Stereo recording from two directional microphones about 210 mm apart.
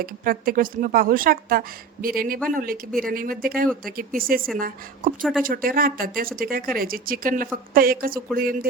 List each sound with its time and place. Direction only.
0.0 s a woman's voice: 45° right (ahead or behind)